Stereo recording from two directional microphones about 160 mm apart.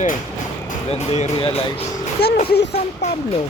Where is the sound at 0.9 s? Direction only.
40° left (ahead or behind).